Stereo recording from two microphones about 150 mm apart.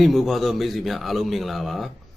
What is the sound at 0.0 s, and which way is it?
A man's voice, centre (ahead or behind).